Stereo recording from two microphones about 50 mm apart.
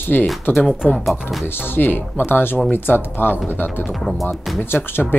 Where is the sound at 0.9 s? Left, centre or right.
Centre.